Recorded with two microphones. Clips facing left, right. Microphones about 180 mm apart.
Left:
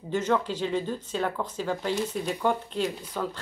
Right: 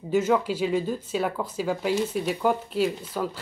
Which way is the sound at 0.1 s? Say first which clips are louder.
Right 4 dB; 10° right (ahead or behind).